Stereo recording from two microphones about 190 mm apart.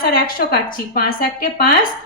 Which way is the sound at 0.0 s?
50° left (ahead or behind).